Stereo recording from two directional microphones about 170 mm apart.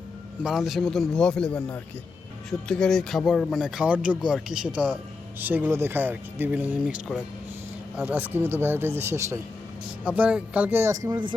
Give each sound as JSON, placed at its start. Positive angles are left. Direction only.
{"t": 0.4, "sound": "speech", "side_deg": 0}
{"t": 8.0, "sound": "speech", "side_deg": -10}